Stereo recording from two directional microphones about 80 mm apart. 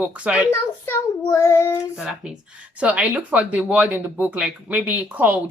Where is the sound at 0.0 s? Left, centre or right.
Centre.